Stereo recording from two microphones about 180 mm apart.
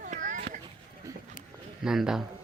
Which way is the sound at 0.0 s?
45° right (ahead or behind).